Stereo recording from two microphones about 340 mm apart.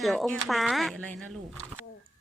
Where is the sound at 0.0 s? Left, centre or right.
Centre.